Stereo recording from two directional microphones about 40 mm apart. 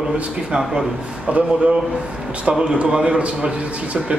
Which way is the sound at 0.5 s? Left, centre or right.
Centre.